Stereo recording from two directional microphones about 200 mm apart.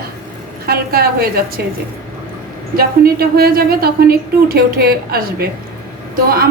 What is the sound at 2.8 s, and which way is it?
A woman's voice, 50° right (ahead or behind).